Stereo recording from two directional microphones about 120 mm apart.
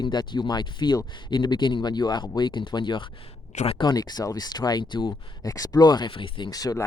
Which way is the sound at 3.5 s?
75° left (ahead or behind).